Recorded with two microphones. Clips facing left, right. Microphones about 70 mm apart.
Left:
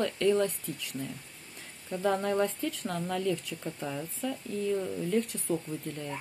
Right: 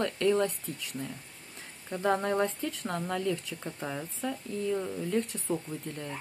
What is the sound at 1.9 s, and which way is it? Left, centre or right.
Speech, right.